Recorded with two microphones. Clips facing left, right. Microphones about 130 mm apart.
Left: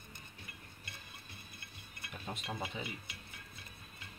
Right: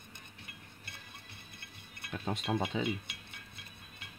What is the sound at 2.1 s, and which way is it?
Speech, 80° right.